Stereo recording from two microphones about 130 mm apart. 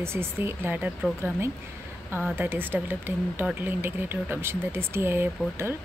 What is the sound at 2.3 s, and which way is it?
Speech, 15° right (ahead or behind).